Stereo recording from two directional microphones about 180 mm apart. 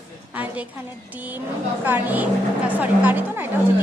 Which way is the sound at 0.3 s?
10° right (ahead or behind).